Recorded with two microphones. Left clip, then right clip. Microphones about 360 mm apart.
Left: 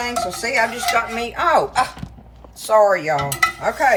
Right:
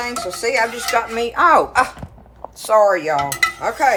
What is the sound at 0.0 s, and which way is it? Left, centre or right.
Speech, centre.